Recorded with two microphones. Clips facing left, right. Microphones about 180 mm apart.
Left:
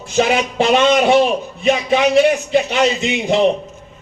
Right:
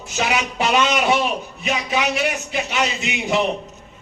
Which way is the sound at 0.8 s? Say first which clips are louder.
Left 7 dB; 45° left (ahead or behind).